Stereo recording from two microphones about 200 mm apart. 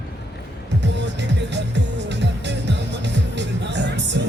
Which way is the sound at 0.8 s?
60° right (ahead or behind).